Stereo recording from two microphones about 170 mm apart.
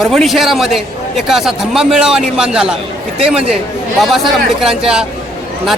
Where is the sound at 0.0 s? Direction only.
Centre (ahead or behind).